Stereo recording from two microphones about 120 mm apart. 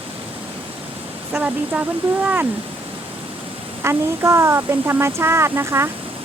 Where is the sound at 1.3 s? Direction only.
10° right (ahead or behind).